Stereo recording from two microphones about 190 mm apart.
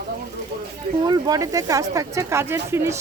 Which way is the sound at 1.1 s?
20° right (ahead or behind).